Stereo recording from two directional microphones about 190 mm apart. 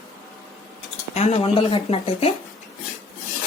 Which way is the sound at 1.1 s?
35° left (ahead or behind).